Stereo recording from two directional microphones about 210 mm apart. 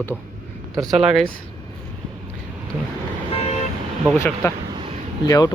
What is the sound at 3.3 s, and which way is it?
Vehicle, 30° left (ahead or behind).